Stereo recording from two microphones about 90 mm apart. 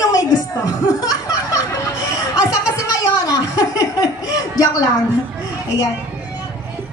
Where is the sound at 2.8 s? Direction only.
45° left (ahead or behind).